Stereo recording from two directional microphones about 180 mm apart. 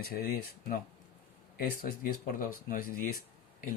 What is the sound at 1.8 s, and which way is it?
Speech, 50° left (ahead or behind).